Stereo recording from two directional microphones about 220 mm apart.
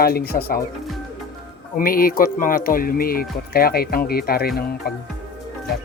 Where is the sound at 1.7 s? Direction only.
40° left (ahead or behind).